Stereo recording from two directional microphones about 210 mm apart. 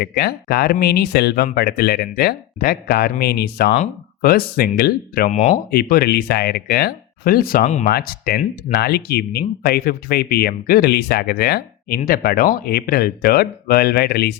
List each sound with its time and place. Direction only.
0.0 s speech: 50° left (ahead or behind)
5.3 s speech: 30° left (ahead or behind)
5.7 s speech: 50° left (ahead or behind)
7.9 s speech: 45° left (ahead or behind)